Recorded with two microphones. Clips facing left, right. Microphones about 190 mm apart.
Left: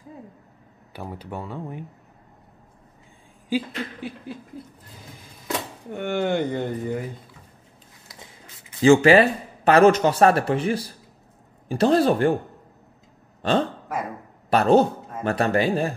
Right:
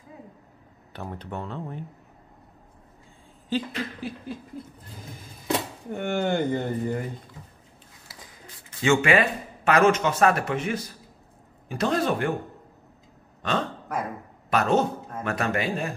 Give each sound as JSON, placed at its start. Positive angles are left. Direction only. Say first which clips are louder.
{"t": 0.9, "sound": "speech", "louder": "left 1 dB", "side_deg": 5}
{"t": 3.4, "sound": "speech", "louder": "left 2 dB", "side_deg": 5}
{"t": 5.9, "sound": "speech", "louder": "left 2 dB", "side_deg": 0}
{"t": 8.8, "sound": "speech", "louder": "left 7 dB", "side_deg": 35}
{"t": 13.4, "sound": "speech", "louder": "left 6 dB", "side_deg": 30}